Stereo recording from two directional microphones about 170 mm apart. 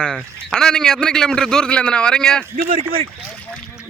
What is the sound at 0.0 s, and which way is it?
A man's voice, 5° left (ahead or behind).